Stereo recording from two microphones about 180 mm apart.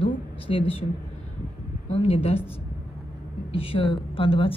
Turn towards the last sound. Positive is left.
turn(degrees=30)  # may be behind; listen again after turning